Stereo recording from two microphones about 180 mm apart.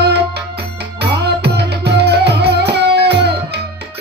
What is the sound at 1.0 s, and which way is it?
Music, 65° right (ahead or behind).